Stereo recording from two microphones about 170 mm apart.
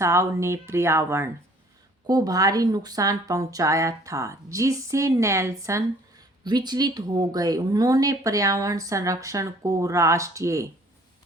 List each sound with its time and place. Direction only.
0.0 s speech: 15° right (ahead or behind)